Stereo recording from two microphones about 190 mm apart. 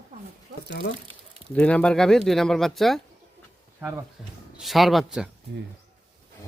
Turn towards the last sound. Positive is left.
turn(degrees=0)  # may be behind; listen again after turning